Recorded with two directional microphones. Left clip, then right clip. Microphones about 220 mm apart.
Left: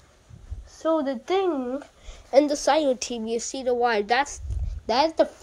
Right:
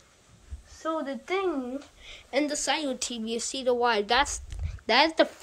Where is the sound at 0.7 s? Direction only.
30° left (ahead or behind).